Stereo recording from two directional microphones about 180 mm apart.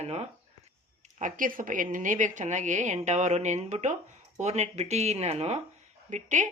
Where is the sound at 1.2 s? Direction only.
45° right (ahead or behind).